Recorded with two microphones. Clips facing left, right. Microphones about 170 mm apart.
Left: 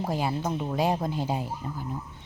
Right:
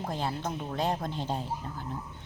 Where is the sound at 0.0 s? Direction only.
10° left (ahead or behind).